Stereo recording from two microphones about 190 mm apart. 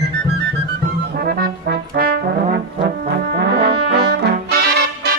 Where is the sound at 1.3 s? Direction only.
50° right (ahead or behind).